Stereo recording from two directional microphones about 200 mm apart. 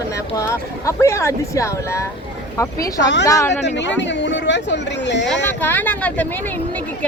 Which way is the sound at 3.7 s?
60° left (ahead or behind).